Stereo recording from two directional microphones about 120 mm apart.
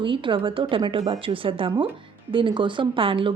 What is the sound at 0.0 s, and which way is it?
Speech, 45° right (ahead or behind).